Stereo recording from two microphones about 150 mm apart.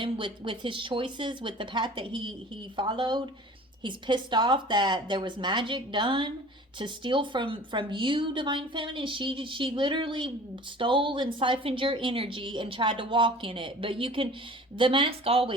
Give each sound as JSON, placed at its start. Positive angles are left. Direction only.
{"t": 0.0, "sound": "a woman's voice", "side_deg": -35}